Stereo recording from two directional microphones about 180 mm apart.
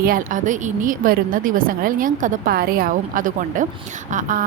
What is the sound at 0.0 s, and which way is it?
A woman's voice, 50° right (ahead or behind).